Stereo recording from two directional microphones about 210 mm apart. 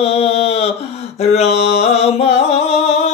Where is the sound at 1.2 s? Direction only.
30° left (ahead or behind).